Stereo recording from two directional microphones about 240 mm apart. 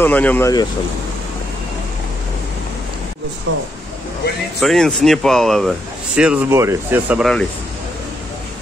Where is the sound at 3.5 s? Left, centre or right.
Right.